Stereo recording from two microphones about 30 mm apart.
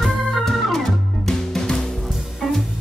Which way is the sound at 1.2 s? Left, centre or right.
Centre.